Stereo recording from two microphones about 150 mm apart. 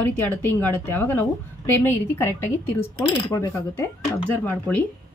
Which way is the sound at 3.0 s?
25° left (ahead or behind).